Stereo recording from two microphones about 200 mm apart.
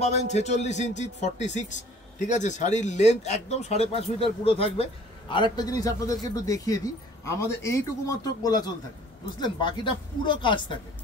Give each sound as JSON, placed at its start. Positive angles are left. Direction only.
{"t": 0.0, "sound": "speech", "side_deg": 35}